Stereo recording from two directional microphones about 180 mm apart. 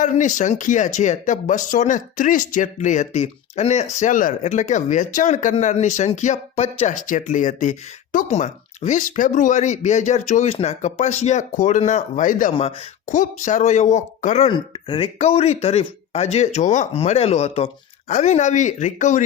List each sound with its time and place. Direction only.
0.0 s speech: 45° left (ahead or behind)
14.5 s speech: 25° left (ahead or behind); by 19.2 s 45° left (ahead or behind)